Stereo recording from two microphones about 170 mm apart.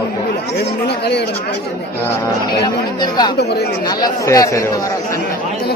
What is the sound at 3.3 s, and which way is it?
Speech, 75° left (ahead or behind).